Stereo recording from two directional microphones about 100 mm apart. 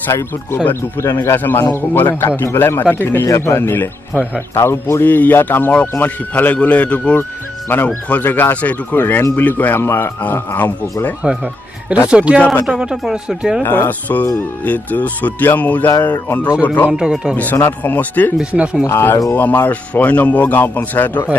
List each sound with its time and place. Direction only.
0.7 s speech: 25° left (ahead or behind)
12.1 s speech: 10° right (ahead or behind)
13.6 s speech: 20° left (ahead or behind)
16.9 s speech: 5° right (ahead or behind)
17.4 s speech: 20° left (ahead or behind)
18.4 s speech: 10° right (ahead or behind)
18.9 s speech: 20° left (ahead or behind)